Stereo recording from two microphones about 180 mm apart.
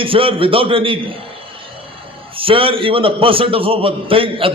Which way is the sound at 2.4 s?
30° right (ahead or behind).